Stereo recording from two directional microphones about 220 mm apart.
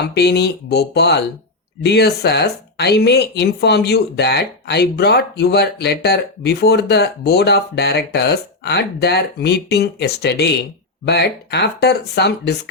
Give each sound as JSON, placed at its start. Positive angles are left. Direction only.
{"t": 0.0, "sound": "speech", "side_deg": 50}